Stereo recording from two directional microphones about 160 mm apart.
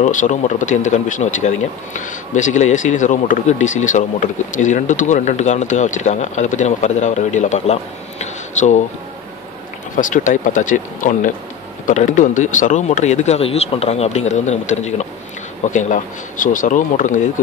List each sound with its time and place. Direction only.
0.0 s speech: 50° left (ahead or behind)
9.9 s speech: 55° left (ahead or behind)